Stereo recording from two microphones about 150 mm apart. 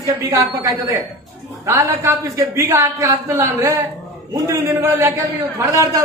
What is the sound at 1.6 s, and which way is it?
Speech, 20° right (ahead or behind).